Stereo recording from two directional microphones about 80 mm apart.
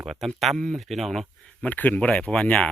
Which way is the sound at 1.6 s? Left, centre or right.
Centre.